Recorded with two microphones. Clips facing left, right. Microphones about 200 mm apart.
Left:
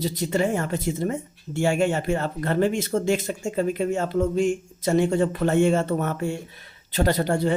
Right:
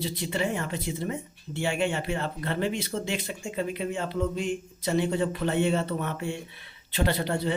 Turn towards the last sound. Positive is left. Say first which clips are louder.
# left 5 dB
turn(degrees=45)  # may be behind; listen again after turning